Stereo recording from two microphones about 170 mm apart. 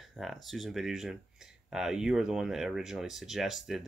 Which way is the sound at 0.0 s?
Centre (ahead or behind).